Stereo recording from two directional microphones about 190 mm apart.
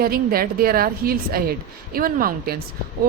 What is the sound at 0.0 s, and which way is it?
Speech, 50° right (ahead or behind).